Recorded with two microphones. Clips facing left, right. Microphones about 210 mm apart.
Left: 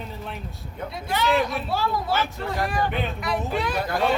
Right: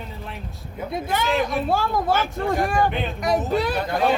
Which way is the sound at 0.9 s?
50° right (ahead or behind).